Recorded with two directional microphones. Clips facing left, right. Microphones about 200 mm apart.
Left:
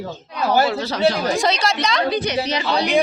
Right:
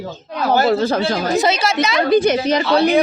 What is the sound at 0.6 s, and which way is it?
Speech, 45° right (ahead or behind).